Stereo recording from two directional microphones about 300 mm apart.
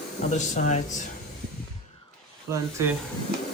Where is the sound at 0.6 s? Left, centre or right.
Left.